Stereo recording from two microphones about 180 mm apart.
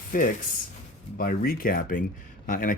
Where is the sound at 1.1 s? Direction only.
55° left (ahead or behind).